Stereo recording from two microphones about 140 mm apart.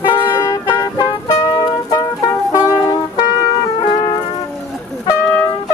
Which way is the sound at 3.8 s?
40° left (ahead or behind).